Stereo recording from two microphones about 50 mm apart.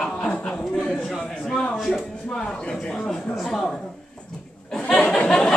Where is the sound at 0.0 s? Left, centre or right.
Centre.